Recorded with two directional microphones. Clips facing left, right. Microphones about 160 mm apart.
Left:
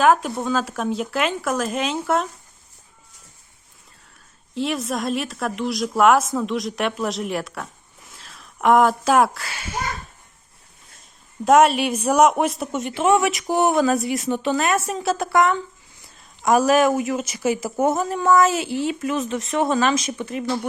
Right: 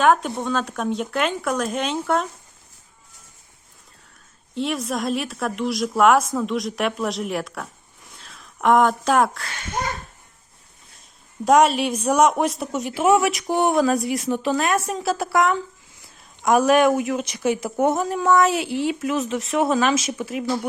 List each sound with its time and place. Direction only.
0.0 s speech: centre (ahead or behind)
4.5 s speech: centre (ahead or behind)
11.4 s speech: centre (ahead or behind)